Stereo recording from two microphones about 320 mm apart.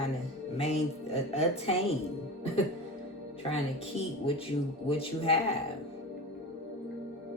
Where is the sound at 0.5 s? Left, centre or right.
Centre.